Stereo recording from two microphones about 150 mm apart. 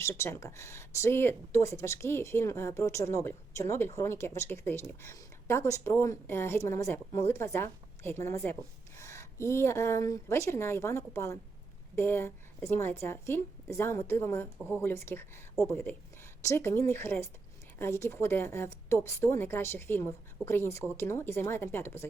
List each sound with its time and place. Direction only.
0.0 s speech: 15° left (ahead or behind)